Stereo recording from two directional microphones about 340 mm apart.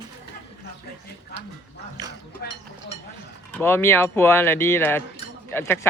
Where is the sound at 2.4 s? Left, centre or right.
Left.